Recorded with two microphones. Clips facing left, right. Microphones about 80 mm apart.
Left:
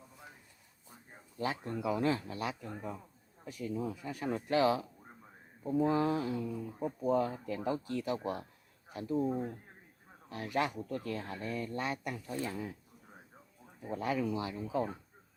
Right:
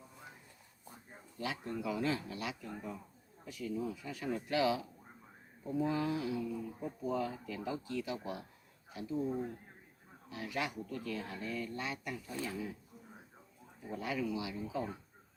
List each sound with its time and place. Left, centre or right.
1.4 s speech: left
10.2 s speech: left
13.8 s speech: left